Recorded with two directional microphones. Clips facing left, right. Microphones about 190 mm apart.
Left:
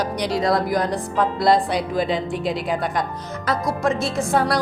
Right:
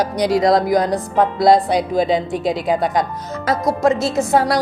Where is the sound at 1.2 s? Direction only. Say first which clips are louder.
Right 4 dB; 45° right (ahead or behind).